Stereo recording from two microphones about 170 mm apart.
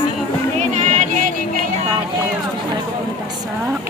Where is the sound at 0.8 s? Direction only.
45° right (ahead or behind).